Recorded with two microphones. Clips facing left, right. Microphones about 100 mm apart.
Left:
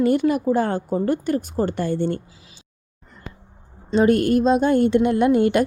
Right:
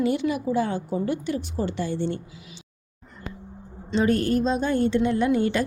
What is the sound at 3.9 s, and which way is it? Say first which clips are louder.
A woman's voice: left 5 dB; 50° left (ahead or behind).